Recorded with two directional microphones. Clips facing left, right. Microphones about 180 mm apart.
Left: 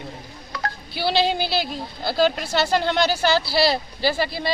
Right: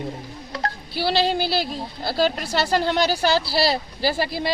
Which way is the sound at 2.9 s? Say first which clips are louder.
Even; 35° right (ahead or behind).